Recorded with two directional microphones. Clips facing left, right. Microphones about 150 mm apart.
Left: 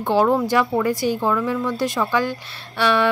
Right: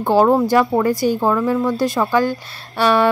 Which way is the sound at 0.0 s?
40° right (ahead or behind).